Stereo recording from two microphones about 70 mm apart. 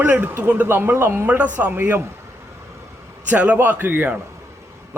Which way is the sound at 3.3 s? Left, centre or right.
Right.